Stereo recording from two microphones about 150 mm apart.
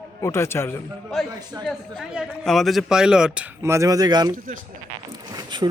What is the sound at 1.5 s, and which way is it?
Speech, 25° right (ahead or behind).